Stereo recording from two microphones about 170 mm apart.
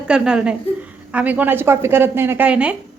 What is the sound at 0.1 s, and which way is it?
A woman's voice, 5° right (ahead or behind).